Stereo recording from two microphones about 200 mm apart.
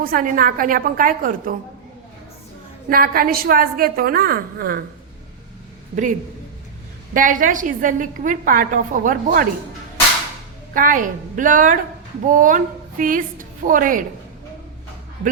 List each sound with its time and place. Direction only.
0.0 s a woman's voice: 45° right (ahead or behind)
2.9 s a woman's voice: 45° right (ahead or behind)
7.1 s a woman's voice: 40° right (ahead or behind)
10.8 s a woman's voice: 40° right (ahead or behind)